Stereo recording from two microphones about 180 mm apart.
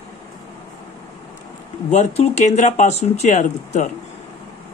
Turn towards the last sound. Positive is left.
turn(degrees=40)  # may be behind; listen again after turning